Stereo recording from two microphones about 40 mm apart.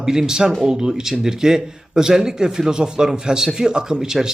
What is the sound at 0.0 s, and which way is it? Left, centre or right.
Speech, centre.